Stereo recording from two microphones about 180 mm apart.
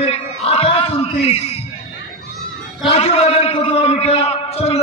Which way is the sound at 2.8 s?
35° left (ahead or behind).